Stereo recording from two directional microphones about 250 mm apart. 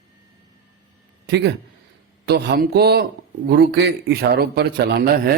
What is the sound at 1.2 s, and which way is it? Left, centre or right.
Speech, right.